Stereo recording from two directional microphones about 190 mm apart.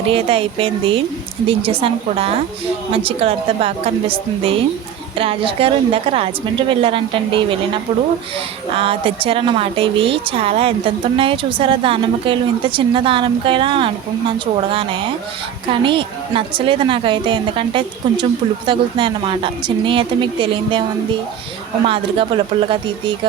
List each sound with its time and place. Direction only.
0.1 s a woman's voice: 30° right (ahead or behind)
8.7 s a woman's voice: 30° right (ahead or behind)
21.8 s a woman's voice: 30° right (ahead or behind)